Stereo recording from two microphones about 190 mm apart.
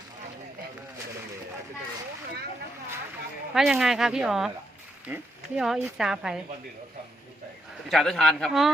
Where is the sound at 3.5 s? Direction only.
Centre (ahead or behind).